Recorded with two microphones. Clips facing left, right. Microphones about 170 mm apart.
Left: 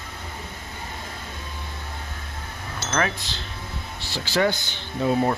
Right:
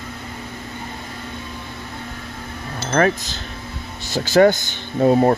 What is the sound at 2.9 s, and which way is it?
Speech, 45° right (ahead or behind).